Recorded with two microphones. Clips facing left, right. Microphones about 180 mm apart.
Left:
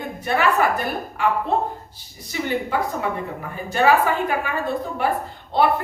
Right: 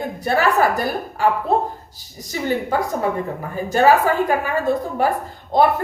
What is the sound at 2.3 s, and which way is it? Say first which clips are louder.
Speech: right 2 dB; 40° right (ahead or behind).